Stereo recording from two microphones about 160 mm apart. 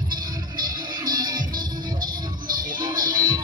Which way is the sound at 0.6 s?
25° right (ahead or behind).